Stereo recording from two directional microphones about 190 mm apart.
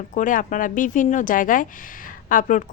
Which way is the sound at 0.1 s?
45° left (ahead or behind).